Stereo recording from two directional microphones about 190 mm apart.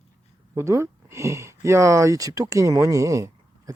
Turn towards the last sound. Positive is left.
turn(degrees=-15)  # may be behind; listen again after turning